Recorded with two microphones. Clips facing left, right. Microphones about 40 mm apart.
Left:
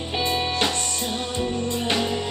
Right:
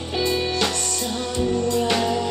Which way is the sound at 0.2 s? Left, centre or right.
Left.